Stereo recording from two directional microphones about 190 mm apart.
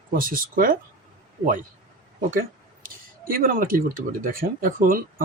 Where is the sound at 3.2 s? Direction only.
50° right (ahead or behind).